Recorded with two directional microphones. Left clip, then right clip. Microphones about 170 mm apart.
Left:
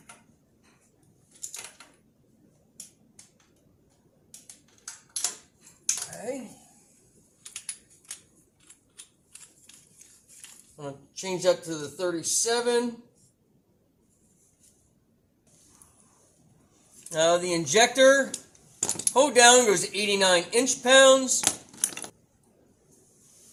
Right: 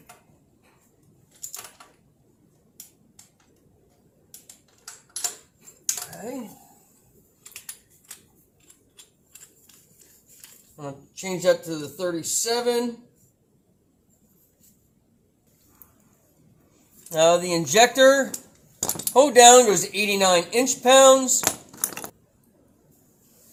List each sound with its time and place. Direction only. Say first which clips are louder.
10.8 s speech: right 2 dB; 10° right (ahead or behind)
17.1 s speech: right 4 dB; 15° right (ahead or behind)
21.4 s a sound: right 2 dB; centre (ahead or behind)